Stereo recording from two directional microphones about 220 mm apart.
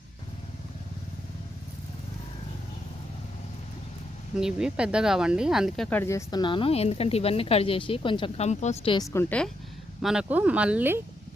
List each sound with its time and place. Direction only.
4.4 s speech: 5° right (ahead or behind); by 9.0 s 20° left (ahead or behind)
9.1 s speech: 5° left (ahead or behind)